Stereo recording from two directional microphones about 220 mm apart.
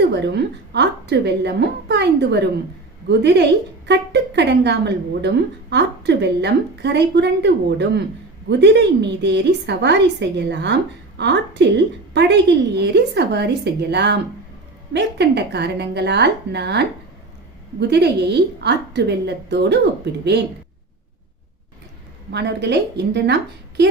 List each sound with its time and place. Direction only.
0.0 s a woman's voice: 50° right (ahead or behind)
22.3 s a woman's voice: 50° right (ahead or behind)